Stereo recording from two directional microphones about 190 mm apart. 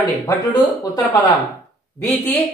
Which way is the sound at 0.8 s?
20° left (ahead or behind).